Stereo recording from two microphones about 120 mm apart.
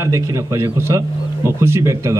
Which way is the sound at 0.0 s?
30° right (ahead or behind).